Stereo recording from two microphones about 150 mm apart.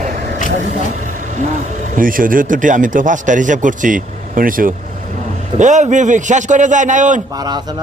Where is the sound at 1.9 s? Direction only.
65° right (ahead or behind).